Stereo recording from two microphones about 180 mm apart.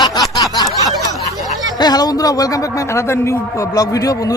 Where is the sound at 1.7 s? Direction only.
20° left (ahead or behind).